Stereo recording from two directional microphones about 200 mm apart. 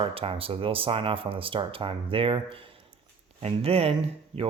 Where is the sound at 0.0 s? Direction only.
30° right (ahead or behind).